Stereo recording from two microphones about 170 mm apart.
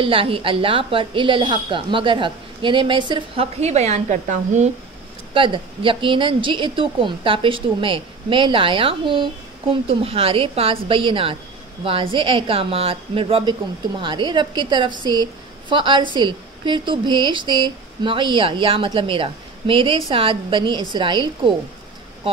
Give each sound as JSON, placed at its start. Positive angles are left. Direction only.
{"t": 0.0, "sound": "a woman's voice", "side_deg": -30}
{"t": 5.3, "sound": "a woman's voice", "side_deg": -30}